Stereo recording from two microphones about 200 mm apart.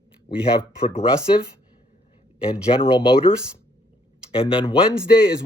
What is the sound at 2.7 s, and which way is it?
Speech, 25° left (ahead or behind).